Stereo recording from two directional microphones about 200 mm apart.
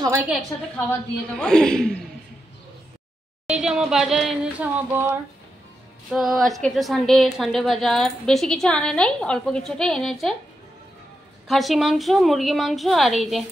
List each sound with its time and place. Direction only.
0.5 s a woman's voice: 15° left (ahead or behind)
0.8 s a woman's voice: 5° left (ahead or behind)
3.4 s a woman's voice: 5° right (ahead or behind)
6.1 s a woman's voice: centre (ahead or behind)
11.4 s a woman's voice: centre (ahead or behind)